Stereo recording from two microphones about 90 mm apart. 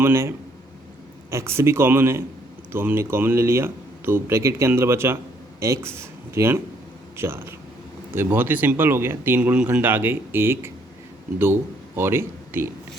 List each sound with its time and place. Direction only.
0.0 s speech: 30° right (ahead or behind)
9.4 s speech: 15° right (ahead or behind)
11.9 s speech: 25° right (ahead or behind)